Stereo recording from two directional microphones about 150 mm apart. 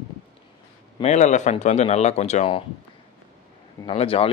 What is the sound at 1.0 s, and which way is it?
Speech, 50° left (ahead or behind).